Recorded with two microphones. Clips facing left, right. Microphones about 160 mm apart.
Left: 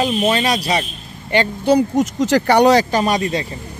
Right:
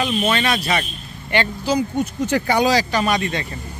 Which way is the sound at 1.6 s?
60° left (ahead or behind).